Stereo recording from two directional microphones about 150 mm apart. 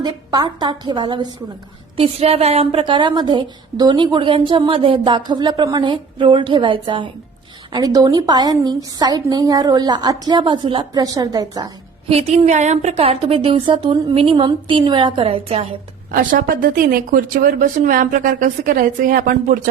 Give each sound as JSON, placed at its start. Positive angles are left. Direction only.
{"t": 0.0, "sound": "a woman's voice", "side_deg": -30}
{"t": 12.0, "sound": "a woman's voice", "side_deg": -40}
{"t": 16.1, "sound": "speech", "side_deg": -65}